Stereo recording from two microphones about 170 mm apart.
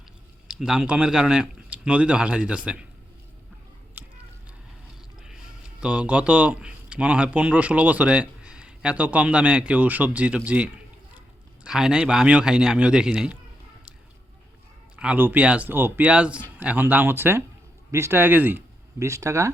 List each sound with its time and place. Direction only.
0.4 s speech: 5° right (ahead or behind)
4.0 s a sound: 10° right (ahead or behind)
5.8 s speech: 5° right (ahead or behind)
14.9 s speech: 10° right (ahead or behind)